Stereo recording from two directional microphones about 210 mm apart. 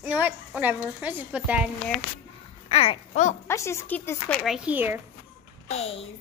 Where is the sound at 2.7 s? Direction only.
30° left (ahead or behind).